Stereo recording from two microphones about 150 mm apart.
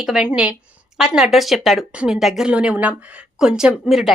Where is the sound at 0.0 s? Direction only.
5° right (ahead or behind).